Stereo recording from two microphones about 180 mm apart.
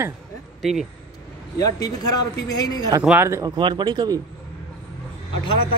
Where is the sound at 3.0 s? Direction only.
10° right (ahead or behind).